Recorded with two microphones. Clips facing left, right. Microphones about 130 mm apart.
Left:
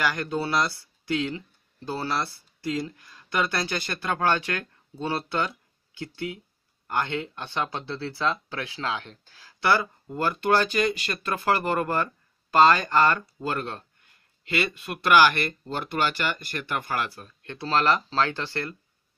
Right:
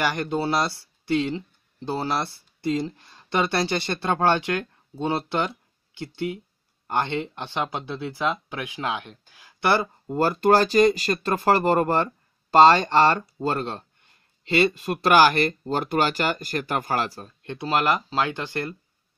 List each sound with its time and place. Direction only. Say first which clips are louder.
0.0 s speech: right 2 dB; 25° right (ahead or behind)
10.0 s speech: right 8 dB; 35° right (ahead or behind)
17.4 s speech: right 1 dB; 20° right (ahead or behind)